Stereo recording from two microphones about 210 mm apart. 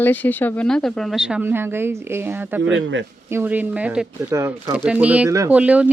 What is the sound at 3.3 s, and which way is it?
A man's voice, 10° right (ahead or behind).